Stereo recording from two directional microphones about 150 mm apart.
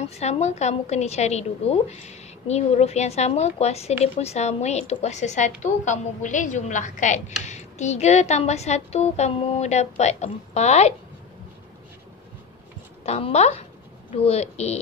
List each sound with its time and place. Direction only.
0.0 s a woman's voice: 45° left (ahead or behind)
13.0 s a woman's voice: 45° left (ahead or behind)